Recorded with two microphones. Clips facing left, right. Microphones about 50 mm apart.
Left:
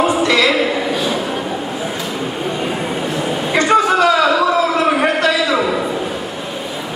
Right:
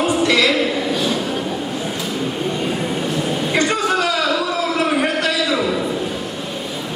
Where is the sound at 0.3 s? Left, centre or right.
Centre.